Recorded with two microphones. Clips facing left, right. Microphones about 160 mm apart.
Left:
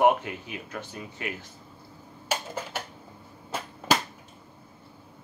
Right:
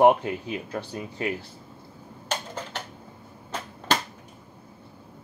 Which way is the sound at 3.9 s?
10° left (ahead or behind).